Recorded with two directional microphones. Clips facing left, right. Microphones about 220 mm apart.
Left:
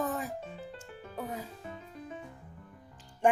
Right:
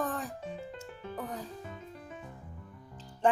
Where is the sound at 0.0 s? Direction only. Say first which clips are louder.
Left 1 dB; 10° left (ahead or behind).